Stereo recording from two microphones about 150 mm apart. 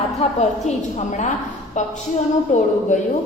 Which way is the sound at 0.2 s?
50° left (ahead or behind).